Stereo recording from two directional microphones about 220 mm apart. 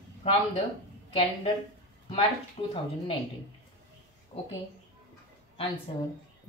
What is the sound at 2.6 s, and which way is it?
Speech, 25° left (ahead or behind).